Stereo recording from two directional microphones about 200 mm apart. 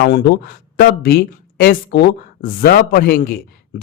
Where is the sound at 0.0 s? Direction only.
55° left (ahead or behind).